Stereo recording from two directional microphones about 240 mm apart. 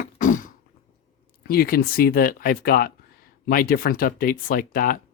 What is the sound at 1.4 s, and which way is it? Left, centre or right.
Speech, left.